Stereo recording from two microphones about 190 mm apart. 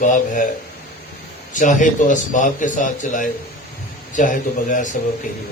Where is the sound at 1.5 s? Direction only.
40° left (ahead or behind).